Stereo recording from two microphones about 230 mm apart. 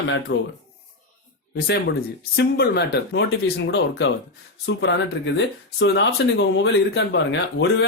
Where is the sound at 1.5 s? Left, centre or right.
Left.